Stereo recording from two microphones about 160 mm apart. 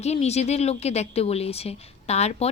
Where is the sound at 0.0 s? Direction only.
40° left (ahead or behind).